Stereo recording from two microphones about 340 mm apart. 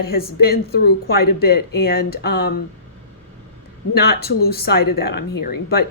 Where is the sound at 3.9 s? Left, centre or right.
Left.